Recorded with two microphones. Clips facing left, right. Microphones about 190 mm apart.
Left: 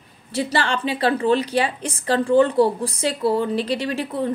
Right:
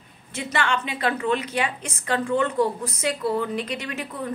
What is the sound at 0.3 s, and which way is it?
A woman's voice, 35° left (ahead or behind).